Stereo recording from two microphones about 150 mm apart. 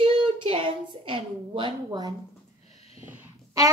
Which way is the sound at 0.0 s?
35° right (ahead or behind).